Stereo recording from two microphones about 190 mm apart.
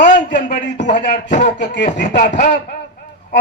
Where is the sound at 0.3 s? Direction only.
40° left (ahead or behind).